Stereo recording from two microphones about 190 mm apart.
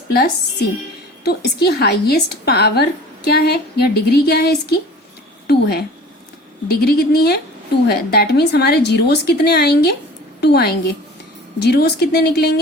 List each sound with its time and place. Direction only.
1.2 s a woman's voice: 60° left (ahead or behind)